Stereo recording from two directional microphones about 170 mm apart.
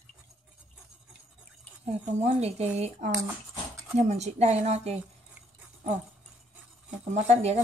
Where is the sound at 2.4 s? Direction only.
40° right (ahead or behind).